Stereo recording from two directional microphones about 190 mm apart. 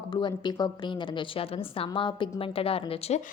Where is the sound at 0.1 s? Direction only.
25° left (ahead or behind).